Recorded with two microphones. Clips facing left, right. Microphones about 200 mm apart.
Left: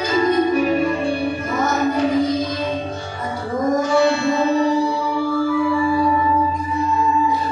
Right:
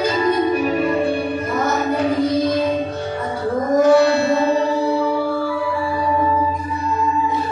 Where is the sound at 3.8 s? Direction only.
55° right (ahead or behind).